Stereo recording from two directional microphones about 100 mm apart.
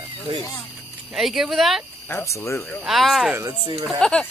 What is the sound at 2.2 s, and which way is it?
Speech, 30° left (ahead or behind).